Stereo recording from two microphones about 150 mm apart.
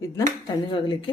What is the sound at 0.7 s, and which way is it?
Speech, 35° left (ahead or behind).